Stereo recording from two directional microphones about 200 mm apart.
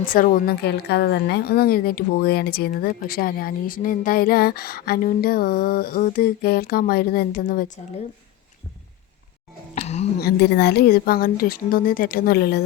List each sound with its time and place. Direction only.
0.0 s a woman's voice: 45° left (ahead or behind)
9.7 s a sound: 35° left (ahead or behind)
10.2 s a woman's voice: 55° left (ahead or behind)